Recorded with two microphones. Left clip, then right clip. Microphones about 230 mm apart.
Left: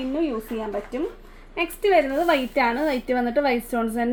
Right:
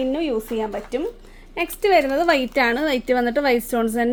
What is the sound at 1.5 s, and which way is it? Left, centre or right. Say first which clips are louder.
A woman's voice: right 2 dB; right.